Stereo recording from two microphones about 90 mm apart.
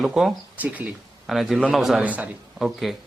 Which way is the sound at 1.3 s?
Centre (ahead or behind).